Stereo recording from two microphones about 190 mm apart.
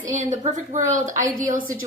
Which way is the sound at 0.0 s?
40° right (ahead or behind).